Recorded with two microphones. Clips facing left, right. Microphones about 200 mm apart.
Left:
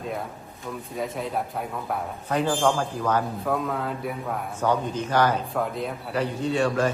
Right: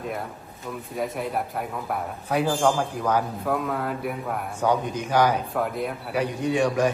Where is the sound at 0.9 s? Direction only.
Centre (ahead or behind).